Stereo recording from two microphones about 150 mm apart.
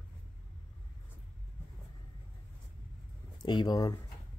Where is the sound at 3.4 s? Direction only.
30° left (ahead or behind).